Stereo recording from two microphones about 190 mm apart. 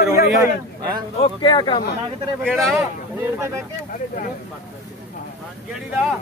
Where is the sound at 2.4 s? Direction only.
Centre (ahead or behind).